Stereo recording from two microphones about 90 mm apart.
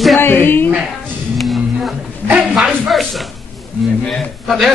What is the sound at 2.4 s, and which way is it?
A man's voice, 5° right (ahead or behind).